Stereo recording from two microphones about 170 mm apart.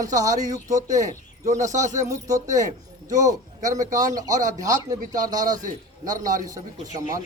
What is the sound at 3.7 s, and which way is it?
Speech, 20° right (ahead or behind).